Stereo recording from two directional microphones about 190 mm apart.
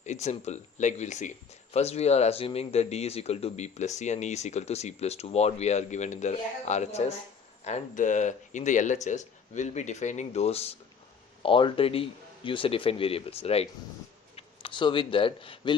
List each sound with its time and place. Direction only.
0.0 s speech: 35° left (ahead or behind)